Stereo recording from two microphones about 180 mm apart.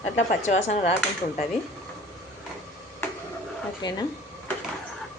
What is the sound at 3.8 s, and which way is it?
Speech, 20° left (ahead or behind).